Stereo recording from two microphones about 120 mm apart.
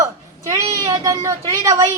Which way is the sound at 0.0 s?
30° right (ahead or behind).